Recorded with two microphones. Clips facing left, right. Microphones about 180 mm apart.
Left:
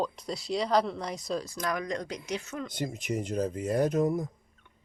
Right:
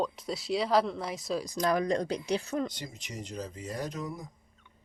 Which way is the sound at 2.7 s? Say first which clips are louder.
Left 10 dB; 50° left (ahead or behind).